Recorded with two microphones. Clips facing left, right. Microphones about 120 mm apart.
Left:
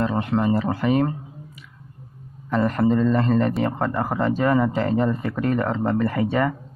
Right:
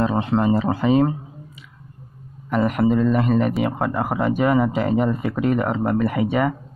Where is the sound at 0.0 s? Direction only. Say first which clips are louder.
Right 2 dB; 20° right (ahead or behind).